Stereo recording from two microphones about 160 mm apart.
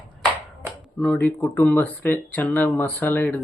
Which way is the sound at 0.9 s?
5° left (ahead or behind).